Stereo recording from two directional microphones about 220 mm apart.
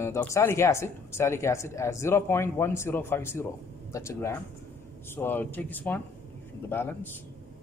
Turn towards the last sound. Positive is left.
turn(degrees=10)  # may be behind; listen again after turning